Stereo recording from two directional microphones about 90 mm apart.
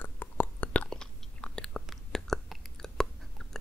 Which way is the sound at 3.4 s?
5° left (ahead or behind).